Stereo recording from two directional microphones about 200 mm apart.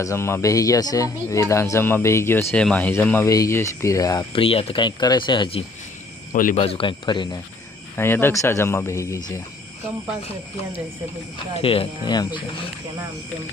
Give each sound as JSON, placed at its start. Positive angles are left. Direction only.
{"t": 0.0, "sound": "speech", "side_deg": 15}
{"t": 6.3, "sound": "speech", "side_deg": 45}
{"t": 6.6, "sound": "speech", "side_deg": 25}
{"t": 7.9, "sound": "speech", "side_deg": 10}
{"t": 11.6, "sound": "speech", "side_deg": 25}